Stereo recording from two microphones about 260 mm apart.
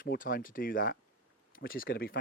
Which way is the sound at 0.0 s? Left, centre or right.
Left.